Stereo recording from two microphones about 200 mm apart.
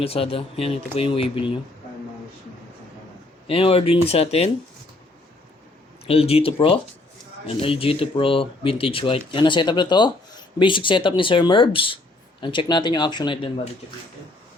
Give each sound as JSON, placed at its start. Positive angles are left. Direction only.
{"t": 0.0, "sound": "speech", "side_deg": 30}
{"t": 3.4, "sound": "speech", "side_deg": 30}
{"t": 6.1, "sound": "speech", "side_deg": 30}